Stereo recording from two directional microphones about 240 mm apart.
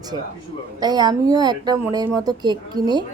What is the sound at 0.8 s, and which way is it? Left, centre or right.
A woman's voice, centre.